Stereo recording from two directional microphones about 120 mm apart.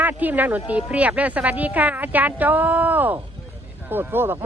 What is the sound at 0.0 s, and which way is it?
A woman's voice, 15° right (ahead or behind).